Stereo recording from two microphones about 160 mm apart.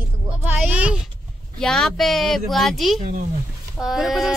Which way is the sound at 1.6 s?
5° left (ahead or behind).